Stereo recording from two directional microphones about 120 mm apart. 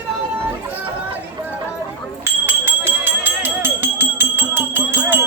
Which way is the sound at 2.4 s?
20° right (ahead or behind).